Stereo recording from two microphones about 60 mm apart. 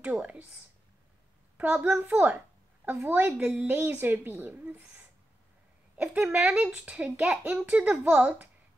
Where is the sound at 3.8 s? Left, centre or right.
Right.